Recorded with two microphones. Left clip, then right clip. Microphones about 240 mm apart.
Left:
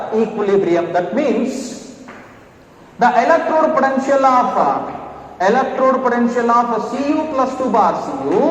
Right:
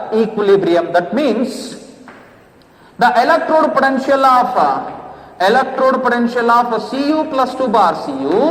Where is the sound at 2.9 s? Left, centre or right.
Right.